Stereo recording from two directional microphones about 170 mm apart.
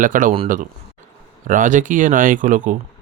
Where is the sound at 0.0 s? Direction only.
50° right (ahead or behind).